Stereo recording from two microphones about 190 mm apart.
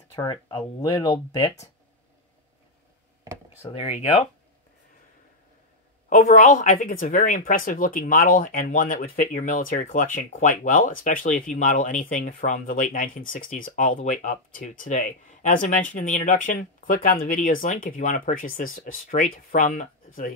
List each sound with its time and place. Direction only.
0.1 s speech: 20° left (ahead or behind)
3.6 s speech: 30° left (ahead or behind)
6.0 s a woman's voice: 45° left (ahead or behind)